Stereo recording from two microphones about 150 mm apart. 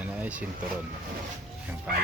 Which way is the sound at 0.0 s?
10° right (ahead or behind).